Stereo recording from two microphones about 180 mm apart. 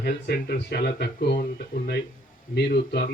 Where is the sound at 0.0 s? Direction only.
65° left (ahead or behind).